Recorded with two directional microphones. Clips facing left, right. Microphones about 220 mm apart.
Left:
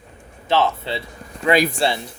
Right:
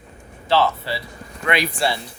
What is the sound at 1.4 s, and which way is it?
Speech, 40° left (ahead or behind).